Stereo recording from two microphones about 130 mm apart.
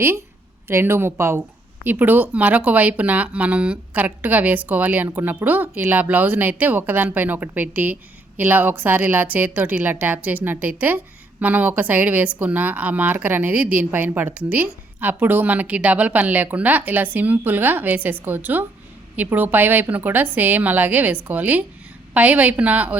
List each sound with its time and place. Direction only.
0.7 s a woman's voice: 20° right (ahead or behind)